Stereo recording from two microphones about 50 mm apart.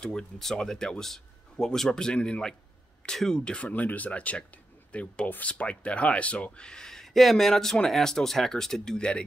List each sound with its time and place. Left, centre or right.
0.0 s speech: centre